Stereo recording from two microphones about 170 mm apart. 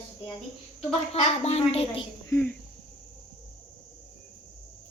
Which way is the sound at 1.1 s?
35° left (ahead or behind).